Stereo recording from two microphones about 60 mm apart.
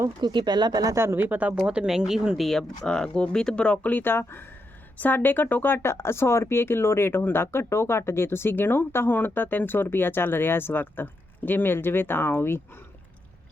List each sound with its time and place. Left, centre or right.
0.7 s speech: right
0.9 s speech: right
1.5 s speech: centre
2.5 s speech: centre; by 4.4 s left
4.9 s speech: left
5.7 s speech: left